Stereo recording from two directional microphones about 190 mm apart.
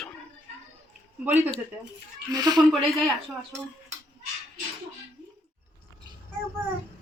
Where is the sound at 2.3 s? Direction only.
20° right (ahead or behind).